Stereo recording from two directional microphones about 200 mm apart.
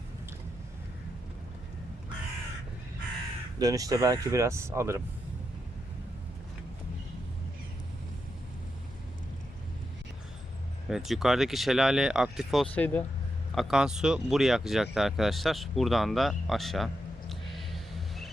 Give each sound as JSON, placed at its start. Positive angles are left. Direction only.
{"t": 3.6, "sound": "speech", "side_deg": -20}
{"t": 10.8, "sound": "speech", "side_deg": 0}
{"t": 13.6, "sound": "speech", "side_deg": -5}
{"t": 14.9, "sound": "a sound", "side_deg": 0}